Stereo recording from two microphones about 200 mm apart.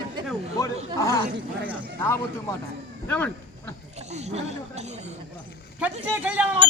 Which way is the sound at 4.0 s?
35° right (ahead or behind).